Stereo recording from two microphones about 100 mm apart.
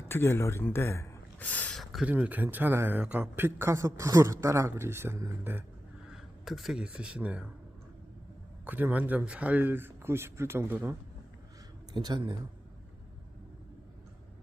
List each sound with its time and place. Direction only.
0.1 s speech: 25° left (ahead or behind)
1.4 s speech: 15° left (ahead or behind)
1.7 s a sound: centre (ahead or behind)
2.0 s a man's voice: 15° right (ahead or behind)
6.1 s speech: 5° right (ahead or behind)
8.6 s a man's voice: 15° right (ahead or behind)
11.9 s a man's voice: 50° right (ahead or behind)